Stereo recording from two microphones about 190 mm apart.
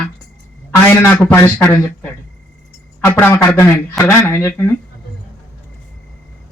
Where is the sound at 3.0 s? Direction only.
10° left (ahead or behind).